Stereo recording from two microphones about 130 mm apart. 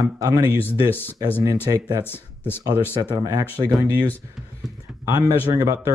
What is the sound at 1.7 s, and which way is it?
Speech, 30° right (ahead or behind).